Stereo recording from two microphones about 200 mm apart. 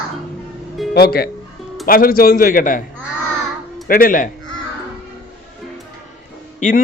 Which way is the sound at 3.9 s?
45° left (ahead or behind).